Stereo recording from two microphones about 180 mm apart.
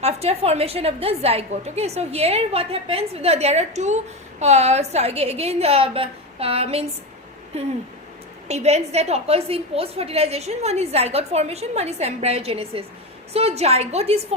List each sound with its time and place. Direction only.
0.0 s a woman's voice: 35° right (ahead or behind)